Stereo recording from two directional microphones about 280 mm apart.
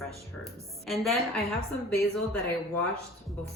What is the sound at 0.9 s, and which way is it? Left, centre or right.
Speech, centre.